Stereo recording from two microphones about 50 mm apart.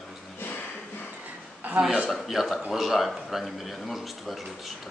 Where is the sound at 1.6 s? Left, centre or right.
Right.